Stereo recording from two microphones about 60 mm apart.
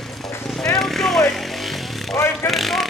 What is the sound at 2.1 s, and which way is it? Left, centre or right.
Vehicle, left.